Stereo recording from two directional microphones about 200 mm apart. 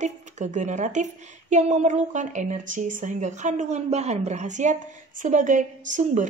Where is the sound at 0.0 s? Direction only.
35° right (ahead or behind).